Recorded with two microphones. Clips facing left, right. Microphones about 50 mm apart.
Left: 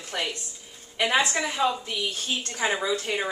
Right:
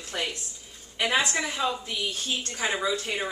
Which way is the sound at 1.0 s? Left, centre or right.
Centre.